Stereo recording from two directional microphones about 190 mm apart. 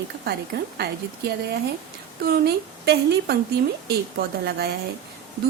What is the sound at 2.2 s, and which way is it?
A woman's voice, 55° right (ahead or behind).